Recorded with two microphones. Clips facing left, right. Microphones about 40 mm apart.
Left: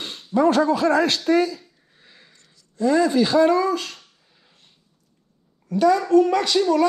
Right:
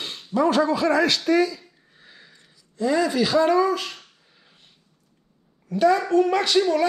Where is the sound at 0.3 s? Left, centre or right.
Left.